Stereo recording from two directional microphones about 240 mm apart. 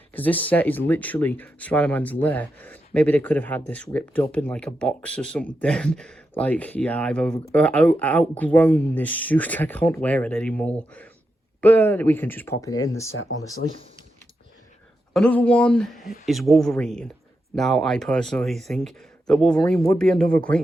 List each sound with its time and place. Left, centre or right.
0.1 s speech: centre
15.1 s speech: centre
20.2 s speech: right